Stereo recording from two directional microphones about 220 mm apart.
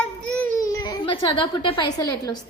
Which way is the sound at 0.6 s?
15° left (ahead or behind).